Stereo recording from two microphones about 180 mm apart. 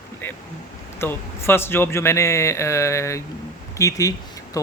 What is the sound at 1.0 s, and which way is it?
Speech, 15° left (ahead or behind).